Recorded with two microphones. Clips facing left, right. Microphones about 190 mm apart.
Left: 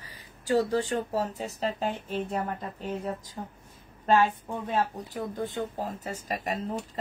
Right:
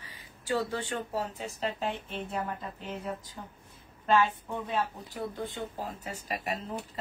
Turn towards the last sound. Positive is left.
turn(degrees=40)  # may be behind; listen again after turning